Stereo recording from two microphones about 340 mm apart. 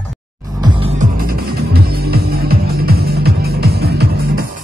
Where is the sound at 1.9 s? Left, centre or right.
Right.